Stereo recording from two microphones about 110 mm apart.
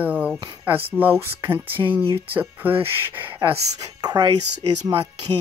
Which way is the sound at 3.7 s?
40° right (ahead or behind).